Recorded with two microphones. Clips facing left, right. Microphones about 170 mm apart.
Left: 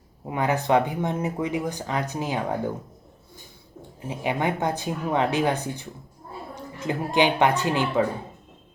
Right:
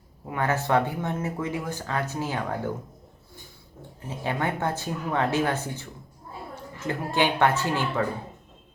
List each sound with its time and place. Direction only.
0.3 s speech: 15° left (ahead or behind)
4.0 s a woman's voice: 15° left (ahead or behind)